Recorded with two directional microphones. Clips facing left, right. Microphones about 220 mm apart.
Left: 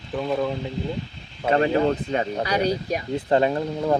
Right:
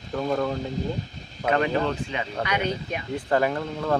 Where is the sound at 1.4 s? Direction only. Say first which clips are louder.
Left 4 dB; 30° left (ahead or behind).